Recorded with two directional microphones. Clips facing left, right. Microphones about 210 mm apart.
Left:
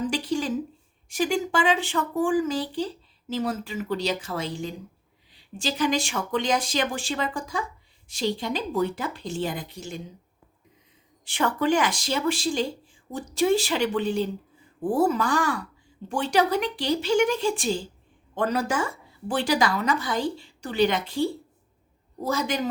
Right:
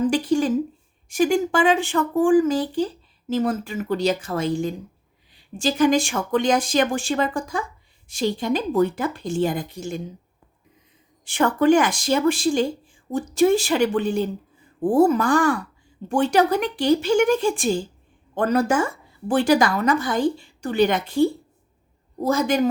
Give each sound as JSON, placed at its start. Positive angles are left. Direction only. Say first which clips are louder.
{"t": 0.0, "sound": "a sound", "louder": "right 7 dB", "side_deg": -50}
{"t": 1.1, "sound": "speech", "louder": "right 5 dB", "side_deg": -50}
{"t": 11.3, "sound": "speech", "louder": "right 6 dB", "side_deg": -50}